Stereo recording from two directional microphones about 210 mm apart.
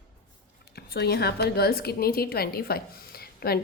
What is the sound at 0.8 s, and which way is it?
A woman's voice, 50° left (ahead or behind).